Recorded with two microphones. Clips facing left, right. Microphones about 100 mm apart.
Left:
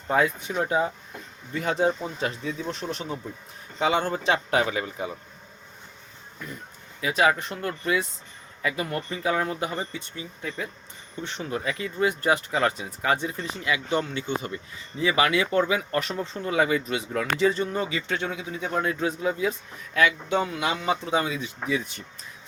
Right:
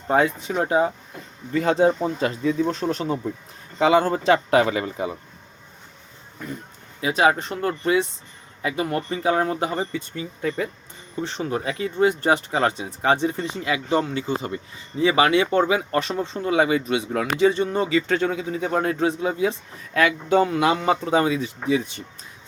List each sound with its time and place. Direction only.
0.1 s speech: 35° right (ahead or behind)
7.0 s speech: 30° right (ahead or behind)
11.2 s speech: 35° right (ahead or behind)
18.1 s speech: 45° right (ahead or behind)